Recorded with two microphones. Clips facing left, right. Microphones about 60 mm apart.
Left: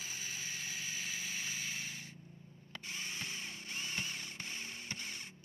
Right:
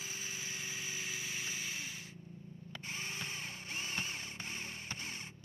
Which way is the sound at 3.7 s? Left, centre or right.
Right.